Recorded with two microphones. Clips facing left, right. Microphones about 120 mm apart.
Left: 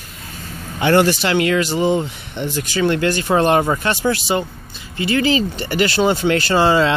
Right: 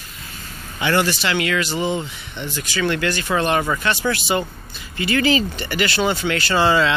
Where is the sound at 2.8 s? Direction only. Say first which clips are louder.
Left 4 dB; 35° left (ahead or behind).